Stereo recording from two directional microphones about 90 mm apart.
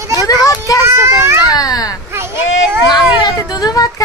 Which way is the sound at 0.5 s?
40° left (ahead or behind).